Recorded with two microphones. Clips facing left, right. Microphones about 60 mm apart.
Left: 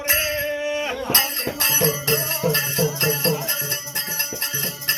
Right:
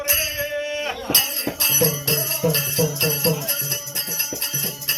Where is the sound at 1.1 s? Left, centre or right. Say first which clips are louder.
Left 1 dB; left.